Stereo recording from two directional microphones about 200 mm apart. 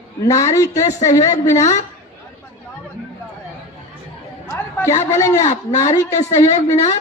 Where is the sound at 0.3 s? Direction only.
15° left (ahead or behind).